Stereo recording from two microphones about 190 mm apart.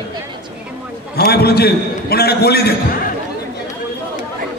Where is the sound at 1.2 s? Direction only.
55° left (ahead or behind).